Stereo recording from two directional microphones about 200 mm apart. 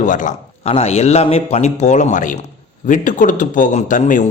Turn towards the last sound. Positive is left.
turn(degrees=40)  # may be behind; listen again after turning